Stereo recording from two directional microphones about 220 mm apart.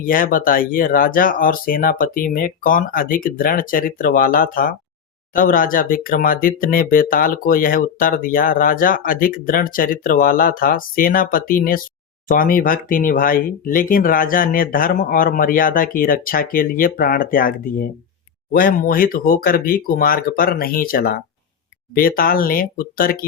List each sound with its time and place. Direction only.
0.0 s speech: 40° left (ahead or behind)